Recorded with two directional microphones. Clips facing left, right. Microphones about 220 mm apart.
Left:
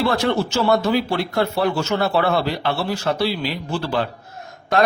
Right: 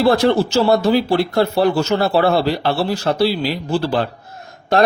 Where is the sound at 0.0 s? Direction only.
35° right (ahead or behind).